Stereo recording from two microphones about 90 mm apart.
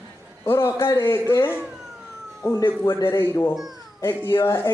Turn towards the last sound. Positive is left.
turn(degrees=25)  # may be behind; listen again after turning